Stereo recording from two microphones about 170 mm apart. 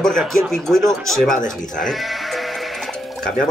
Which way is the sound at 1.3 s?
50° left (ahead or behind).